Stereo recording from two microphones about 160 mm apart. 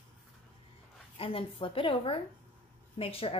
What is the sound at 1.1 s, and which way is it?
A woman's voice, 35° left (ahead or behind).